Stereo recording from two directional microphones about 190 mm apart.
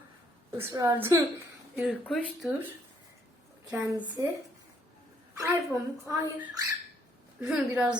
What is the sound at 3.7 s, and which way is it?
Speech, 15° right (ahead or behind).